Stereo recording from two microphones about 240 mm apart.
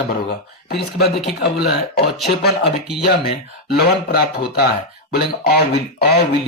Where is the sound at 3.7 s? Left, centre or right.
Left.